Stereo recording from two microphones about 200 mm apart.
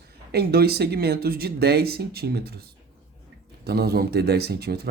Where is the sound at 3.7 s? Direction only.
50° right (ahead or behind).